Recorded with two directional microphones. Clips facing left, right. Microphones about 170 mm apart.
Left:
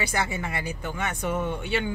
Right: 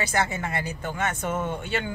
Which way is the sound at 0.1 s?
45° right (ahead or behind).